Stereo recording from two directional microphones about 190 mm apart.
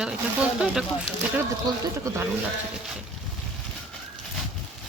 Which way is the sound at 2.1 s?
15° right (ahead or behind).